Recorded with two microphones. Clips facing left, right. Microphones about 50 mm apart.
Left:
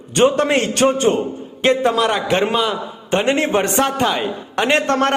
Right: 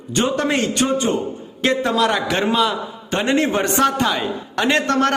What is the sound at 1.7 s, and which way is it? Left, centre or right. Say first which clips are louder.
A man's voice: left 2 dB; left.